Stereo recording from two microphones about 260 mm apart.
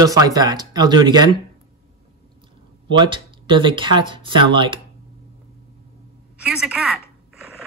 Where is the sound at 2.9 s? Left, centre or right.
Centre.